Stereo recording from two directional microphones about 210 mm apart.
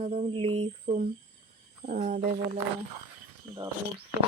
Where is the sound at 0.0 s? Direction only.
30° right (ahead or behind).